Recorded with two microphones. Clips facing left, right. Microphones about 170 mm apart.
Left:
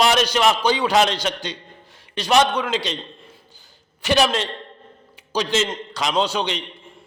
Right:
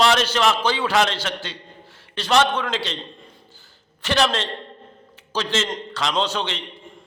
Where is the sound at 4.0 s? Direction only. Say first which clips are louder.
Left 2 dB; 10° left (ahead or behind).